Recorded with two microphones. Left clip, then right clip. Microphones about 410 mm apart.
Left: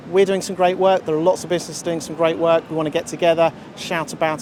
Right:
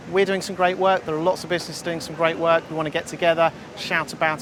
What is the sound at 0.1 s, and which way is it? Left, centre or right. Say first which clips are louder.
Speech: left 4 dB; right.